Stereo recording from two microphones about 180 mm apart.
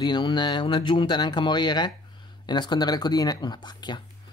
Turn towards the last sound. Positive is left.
turn(degrees=25)  # may be behind; listen again after turning